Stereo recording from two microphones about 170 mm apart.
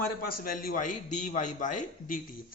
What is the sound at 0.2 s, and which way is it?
Speech, 60° left (ahead or behind).